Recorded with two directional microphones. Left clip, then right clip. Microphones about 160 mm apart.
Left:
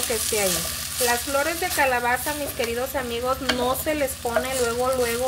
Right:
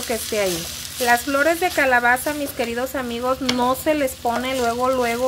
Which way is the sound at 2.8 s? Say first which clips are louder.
Right 2 dB; 40° right (ahead or behind).